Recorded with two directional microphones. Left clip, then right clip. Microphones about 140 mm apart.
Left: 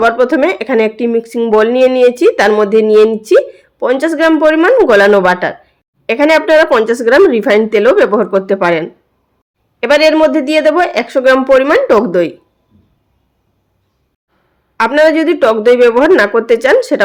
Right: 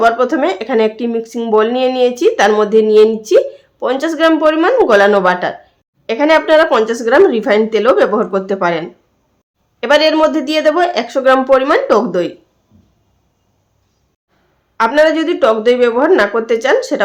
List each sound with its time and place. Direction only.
0.0 s speech: 25° left (ahead or behind)
14.8 s speech: 30° left (ahead or behind)